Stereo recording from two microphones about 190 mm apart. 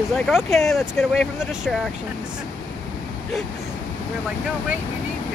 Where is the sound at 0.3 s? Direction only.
Centre (ahead or behind).